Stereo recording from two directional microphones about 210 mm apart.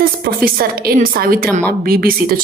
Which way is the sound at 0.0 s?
45° right (ahead or behind).